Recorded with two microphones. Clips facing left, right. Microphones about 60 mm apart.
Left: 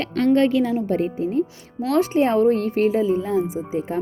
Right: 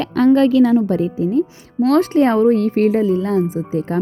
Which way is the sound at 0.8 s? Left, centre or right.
Right.